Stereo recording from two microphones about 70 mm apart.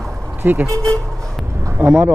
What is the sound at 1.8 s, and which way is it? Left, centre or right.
Speech, right.